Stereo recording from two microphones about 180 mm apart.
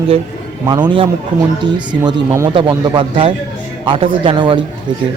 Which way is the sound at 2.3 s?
15° right (ahead or behind).